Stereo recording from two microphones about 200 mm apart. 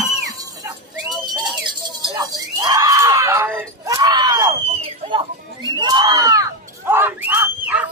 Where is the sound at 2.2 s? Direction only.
20° right (ahead or behind).